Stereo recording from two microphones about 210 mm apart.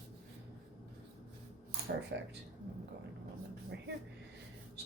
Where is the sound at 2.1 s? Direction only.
55° right (ahead or behind).